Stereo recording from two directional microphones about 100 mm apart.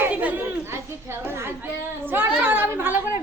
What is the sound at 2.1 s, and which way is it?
Chatter, 20° right (ahead or behind).